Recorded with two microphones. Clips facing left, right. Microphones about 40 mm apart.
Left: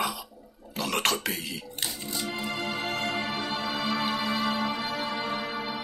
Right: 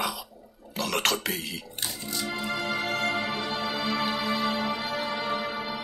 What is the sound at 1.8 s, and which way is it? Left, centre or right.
Music, centre.